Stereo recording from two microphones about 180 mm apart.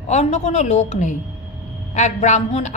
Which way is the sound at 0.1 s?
40° left (ahead or behind).